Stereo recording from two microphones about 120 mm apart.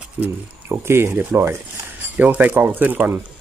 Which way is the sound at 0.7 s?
20° right (ahead or behind).